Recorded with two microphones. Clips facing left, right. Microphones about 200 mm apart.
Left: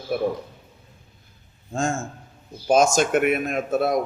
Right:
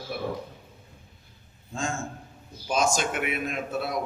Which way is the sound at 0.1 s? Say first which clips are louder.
Left 10 dB; 45° left (ahead or behind).